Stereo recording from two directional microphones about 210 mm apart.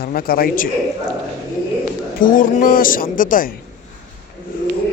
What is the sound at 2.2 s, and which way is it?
Speech, 40° left (ahead or behind).